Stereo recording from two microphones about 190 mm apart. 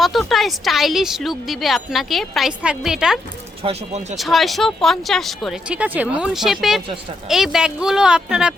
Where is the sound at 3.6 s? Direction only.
30° right (ahead or behind).